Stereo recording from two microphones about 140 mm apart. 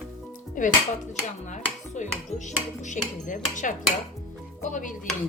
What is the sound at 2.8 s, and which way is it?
Speech, 65° left (ahead or behind).